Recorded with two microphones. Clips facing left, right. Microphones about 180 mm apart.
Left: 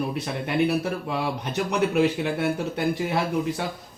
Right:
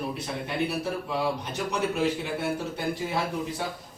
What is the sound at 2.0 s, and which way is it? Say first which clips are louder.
Speech: left 5 dB; 75° left (ahead or behind).